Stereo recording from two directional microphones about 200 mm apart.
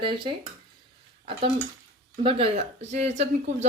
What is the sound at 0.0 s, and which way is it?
Speech, 25° right (ahead or behind).